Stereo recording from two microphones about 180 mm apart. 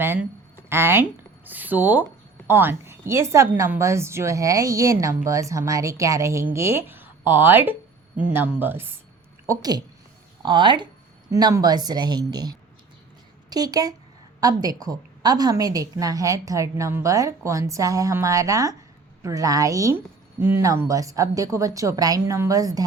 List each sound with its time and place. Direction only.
0.0 s a woman's voice: 10° right (ahead or behind)